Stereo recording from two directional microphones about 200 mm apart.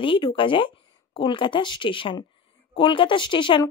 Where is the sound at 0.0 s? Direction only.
25° left (ahead or behind).